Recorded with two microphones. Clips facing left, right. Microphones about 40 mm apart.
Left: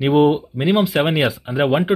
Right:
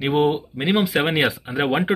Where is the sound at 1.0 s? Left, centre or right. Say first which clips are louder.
Left 2 dB; right.